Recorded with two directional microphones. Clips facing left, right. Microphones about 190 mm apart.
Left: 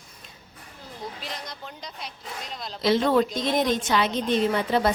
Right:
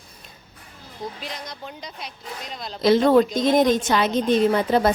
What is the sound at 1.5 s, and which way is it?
Speech, centre (ahead or behind).